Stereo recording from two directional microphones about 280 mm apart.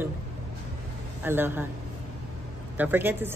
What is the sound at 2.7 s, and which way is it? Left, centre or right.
Speech, centre.